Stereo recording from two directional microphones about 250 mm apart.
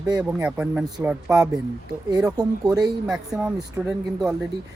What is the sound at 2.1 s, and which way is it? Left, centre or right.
Speech, centre.